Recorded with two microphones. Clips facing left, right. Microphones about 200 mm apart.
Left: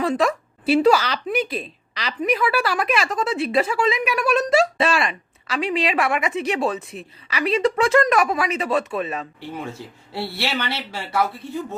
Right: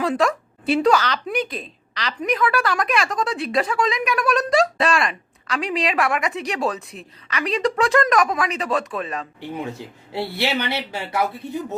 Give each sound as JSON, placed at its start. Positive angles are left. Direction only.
{"t": 0.0, "sound": "speech", "side_deg": 0}
{"t": 9.7, "sound": "speech", "side_deg": -15}